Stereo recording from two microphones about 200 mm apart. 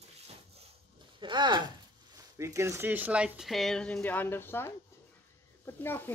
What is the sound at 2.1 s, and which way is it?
Speech, 15° right (ahead or behind).